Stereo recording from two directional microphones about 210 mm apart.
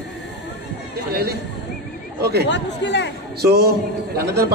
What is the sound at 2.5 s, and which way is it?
Speech, 55° left (ahead or behind).